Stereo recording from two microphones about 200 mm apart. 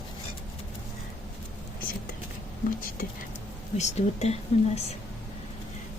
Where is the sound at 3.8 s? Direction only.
35° left (ahead or behind).